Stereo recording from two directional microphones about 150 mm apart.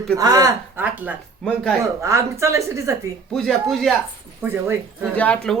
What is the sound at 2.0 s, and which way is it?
A woman's voice, 20° right (ahead or behind).